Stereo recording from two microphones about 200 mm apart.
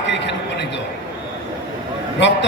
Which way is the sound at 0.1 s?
60° left (ahead or behind).